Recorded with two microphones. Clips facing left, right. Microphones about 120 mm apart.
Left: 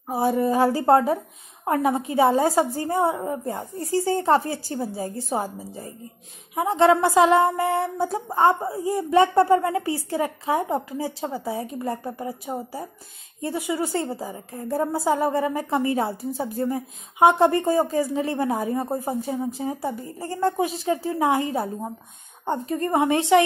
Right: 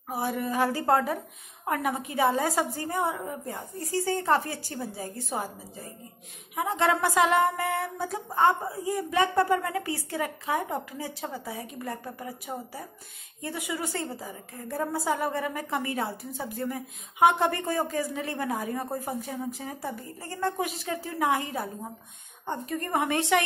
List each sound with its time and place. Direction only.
0.1 s a woman's voice: 30° left (ahead or behind)
6.5 s a woman's voice: 30° left (ahead or behind)